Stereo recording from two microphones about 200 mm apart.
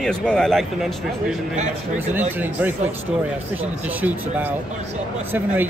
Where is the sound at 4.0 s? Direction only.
10° right (ahead or behind).